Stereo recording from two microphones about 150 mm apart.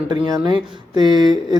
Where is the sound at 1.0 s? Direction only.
30° right (ahead or behind).